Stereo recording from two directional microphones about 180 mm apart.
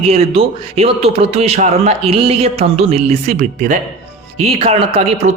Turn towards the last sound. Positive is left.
turn(degrees=-35)  # may be behind; listen again after turning